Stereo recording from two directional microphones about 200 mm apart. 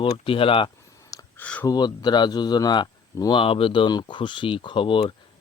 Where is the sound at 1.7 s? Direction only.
20° left (ahead or behind).